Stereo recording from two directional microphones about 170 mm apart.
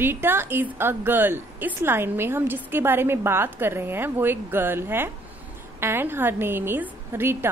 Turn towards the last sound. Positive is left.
turn(degrees=-15)  # may be behind; listen again after turning